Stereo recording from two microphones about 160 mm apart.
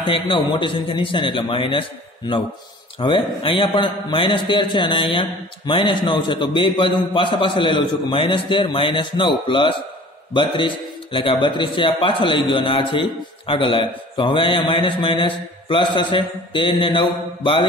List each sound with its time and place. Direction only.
0.0 s a man's voice: 35° left (ahead or behind)